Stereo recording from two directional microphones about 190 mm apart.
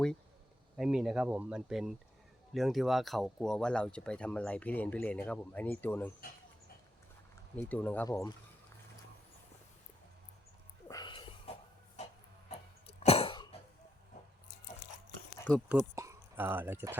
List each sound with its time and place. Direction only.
0.8 s speech: centre (ahead or behind)
7.5 s speech: 10° left (ahead or behind)
10.8 s a sound: 20° left (ahead or behind)
12.5 s cough: 35° left (ahead or behind)
15.7 s speech: 15° right (ahead or behind)